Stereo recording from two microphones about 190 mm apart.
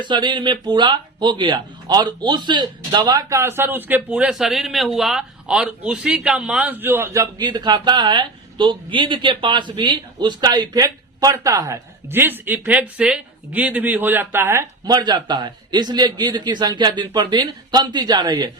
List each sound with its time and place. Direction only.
0.0 s speech: 25° right (ahead or behind)